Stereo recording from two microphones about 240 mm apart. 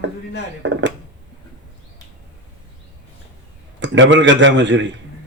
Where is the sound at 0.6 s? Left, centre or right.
Right.